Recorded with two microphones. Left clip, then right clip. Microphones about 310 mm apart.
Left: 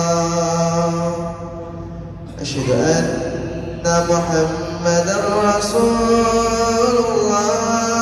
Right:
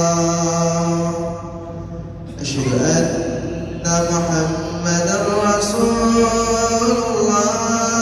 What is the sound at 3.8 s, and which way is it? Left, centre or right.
Mantra, centre.